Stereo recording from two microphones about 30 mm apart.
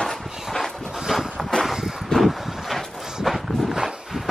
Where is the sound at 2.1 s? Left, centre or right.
Left.